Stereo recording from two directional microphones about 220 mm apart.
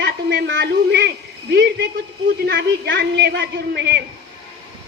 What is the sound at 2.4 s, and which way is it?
A woman's voice, 50° right (ahead or behind).